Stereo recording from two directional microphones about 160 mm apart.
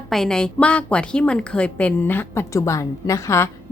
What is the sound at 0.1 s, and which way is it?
A woman's voice, 5° left (ahead or behind).